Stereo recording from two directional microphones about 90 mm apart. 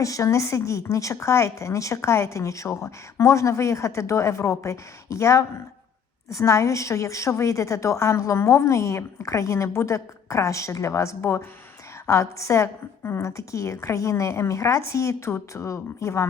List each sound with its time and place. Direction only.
0.0 s speech: 35° left (ahead or behind)